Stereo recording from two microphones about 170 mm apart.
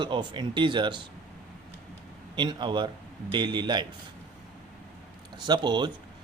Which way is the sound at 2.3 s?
25° right (ahead or behind).